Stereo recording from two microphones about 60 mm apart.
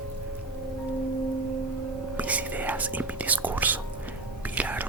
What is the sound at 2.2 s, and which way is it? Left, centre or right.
Whispering, right.